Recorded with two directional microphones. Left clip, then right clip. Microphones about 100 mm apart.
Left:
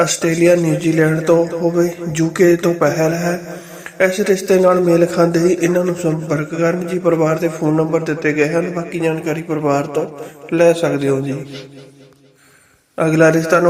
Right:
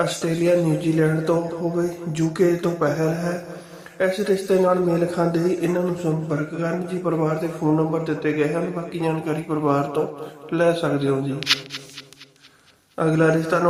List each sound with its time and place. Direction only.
0.0 s speech: 35° left (ahead or behind)
8.9 s a man's voice: 15° left (ahead or behind)
13.0 s a man's voice: 30° left (ahead or behind)